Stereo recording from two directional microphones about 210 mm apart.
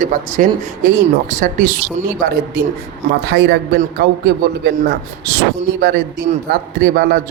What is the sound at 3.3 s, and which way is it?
A man's voice, 50° right (ahead or behind).